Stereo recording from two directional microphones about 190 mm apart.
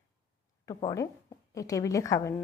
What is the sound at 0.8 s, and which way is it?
A woman's voice, 20° left (ahead or behind).